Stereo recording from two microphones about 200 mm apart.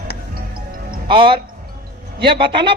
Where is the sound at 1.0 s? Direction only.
25° right (ahead or behind).